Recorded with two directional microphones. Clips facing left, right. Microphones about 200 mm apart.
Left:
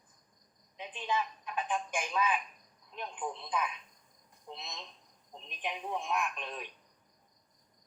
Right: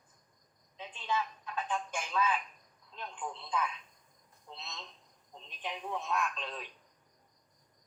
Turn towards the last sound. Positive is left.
turn(degrees=15)  # may be behind; listen again after turning